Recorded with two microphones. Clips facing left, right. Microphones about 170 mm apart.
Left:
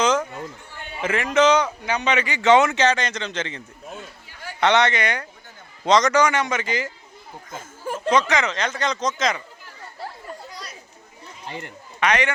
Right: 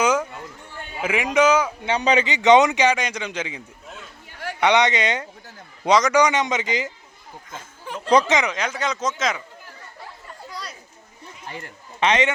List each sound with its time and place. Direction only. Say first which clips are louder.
0.0 s a sound: even; 10° right (ahead or behind)
1.0 s speech: even; 15° right (ahead or behind)
1.8 s a man's voice: right 3 dB; 30° right (ahead or behind)
2.2 s speech: right 1 dB; 20° right (ahead or behind)
4.3 s a sound: right 10 dB; 70° right (ahead or behind)
4.6 s speech: even; 15° right (ahead or behind)
5.8 s speech: even; 10° right (ahead or behind)
8.3 s speech: right 1 dB; 15° right (ahead or behind)
11.4 s speech: left 2 dB; 20° left (ahead or behind)
11.9 s a man's voice: right 2 dB; 25° right (ahead or behind)